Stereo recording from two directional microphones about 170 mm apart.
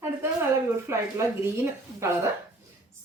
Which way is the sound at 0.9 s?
15° right (ahead or behind).